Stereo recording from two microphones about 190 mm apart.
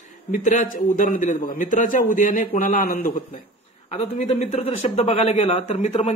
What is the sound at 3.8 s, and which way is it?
Speech, 35° left (ahead or behind).